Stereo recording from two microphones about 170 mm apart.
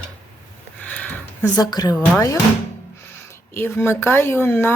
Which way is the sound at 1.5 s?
25° left (ahead or behind).